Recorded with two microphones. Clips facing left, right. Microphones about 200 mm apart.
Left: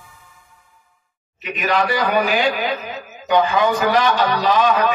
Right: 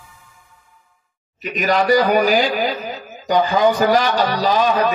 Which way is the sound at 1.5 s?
35° right (ahead or behind).